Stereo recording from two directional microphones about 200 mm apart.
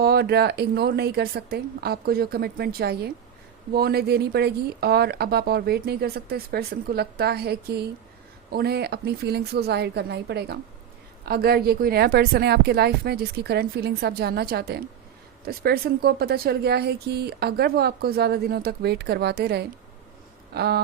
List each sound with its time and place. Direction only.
0.0 s speech: 50° right (ahead or behind)